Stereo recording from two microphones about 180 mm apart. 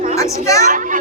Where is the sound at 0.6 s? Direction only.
45° right (ahead or behind).